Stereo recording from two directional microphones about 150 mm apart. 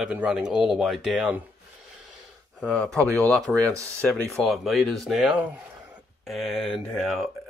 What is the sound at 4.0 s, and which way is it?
Speech, centre (ahead or behind).